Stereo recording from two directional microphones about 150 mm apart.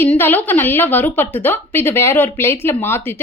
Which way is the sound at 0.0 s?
15° left (ahead or behind).